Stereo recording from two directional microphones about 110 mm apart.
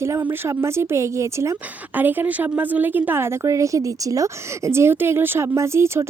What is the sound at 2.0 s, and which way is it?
A woman's voice, 15° right (ahead or behind).